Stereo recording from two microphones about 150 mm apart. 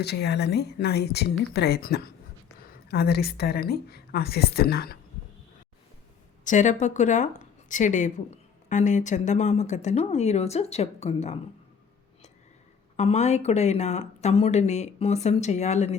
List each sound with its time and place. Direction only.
0.0 s speech: 90° left
6.4 s speech: 55° left (ahead or behind)
13.0 s speech: 45° left (ahead or behind)